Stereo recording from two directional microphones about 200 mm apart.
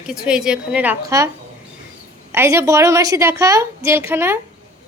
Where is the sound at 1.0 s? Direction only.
15° right (ahead or behind).